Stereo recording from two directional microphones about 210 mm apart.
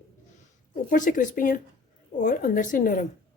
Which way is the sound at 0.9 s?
40° left (ahead or behind).